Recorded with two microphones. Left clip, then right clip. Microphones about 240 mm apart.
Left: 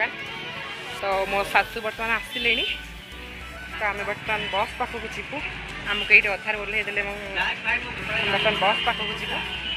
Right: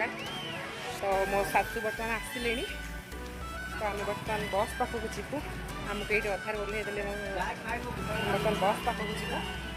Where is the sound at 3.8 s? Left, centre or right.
Centre.